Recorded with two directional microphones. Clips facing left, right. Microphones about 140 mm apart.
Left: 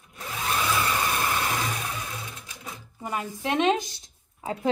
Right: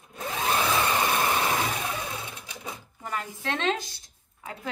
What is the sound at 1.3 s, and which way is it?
Vehicle, 20° right (ahead or behind).